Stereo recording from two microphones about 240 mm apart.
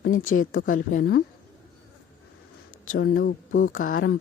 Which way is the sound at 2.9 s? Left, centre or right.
Left.